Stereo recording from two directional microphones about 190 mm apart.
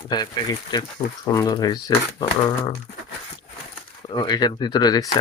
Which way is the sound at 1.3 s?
20° left (ahead or behind).